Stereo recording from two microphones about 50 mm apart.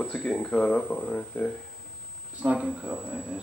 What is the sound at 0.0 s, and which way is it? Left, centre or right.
Speech, left.